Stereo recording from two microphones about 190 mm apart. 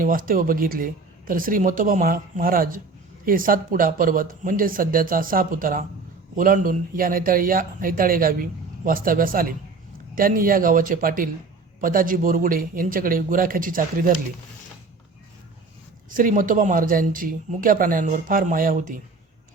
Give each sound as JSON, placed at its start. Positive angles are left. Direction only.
{"t": 0.0, "sound": "speech", "side_deg": -45}
{"t": 16.0, "sound": "speech", "side_deg": -45}